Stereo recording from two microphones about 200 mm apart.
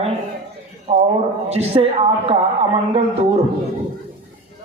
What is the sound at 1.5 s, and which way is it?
Speech, 30° right (ahead or behind).